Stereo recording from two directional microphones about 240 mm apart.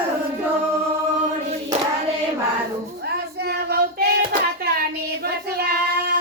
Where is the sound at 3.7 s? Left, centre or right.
Right.